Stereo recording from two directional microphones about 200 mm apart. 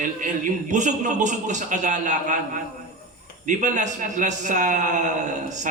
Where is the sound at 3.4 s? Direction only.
40° right (ahead or behind).